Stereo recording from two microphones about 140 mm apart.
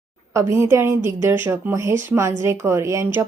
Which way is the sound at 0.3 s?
20° right (ahead or behind).